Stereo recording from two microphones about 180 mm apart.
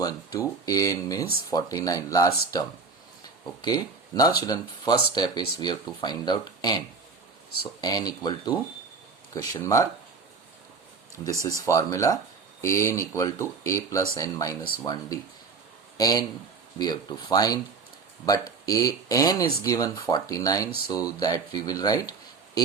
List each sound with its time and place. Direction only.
0.0 s speech: 20° left (ahead or behind)
11.2 s speech: 15° right (ahead or behind)
11.4 s a man's voice: 20° left (ahead or behind)